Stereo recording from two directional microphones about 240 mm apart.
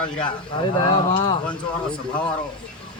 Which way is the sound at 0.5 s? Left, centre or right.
Centre.